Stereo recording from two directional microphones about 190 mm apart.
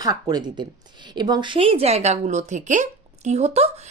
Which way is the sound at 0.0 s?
20° right (ahead or behind).